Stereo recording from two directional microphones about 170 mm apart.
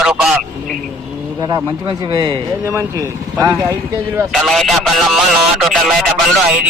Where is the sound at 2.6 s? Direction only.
15° right (ahead or behind).